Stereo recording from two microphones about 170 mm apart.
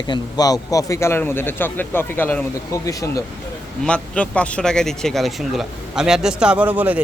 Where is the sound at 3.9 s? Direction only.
5° left (ahead or behind).